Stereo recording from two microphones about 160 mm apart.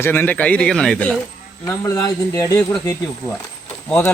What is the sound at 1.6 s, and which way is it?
A man's voice, 15° left (ahead or behind).